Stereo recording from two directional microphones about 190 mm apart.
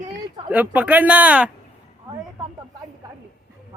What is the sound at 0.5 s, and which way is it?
Speech, 10° right (ahead or behind).